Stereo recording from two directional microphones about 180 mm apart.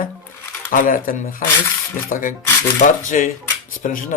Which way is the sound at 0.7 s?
50° left (ahead or behind).